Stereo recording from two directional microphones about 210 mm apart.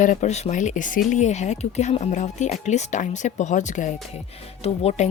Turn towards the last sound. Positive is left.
turn(degrees=30)  # may be behind; listen again after turning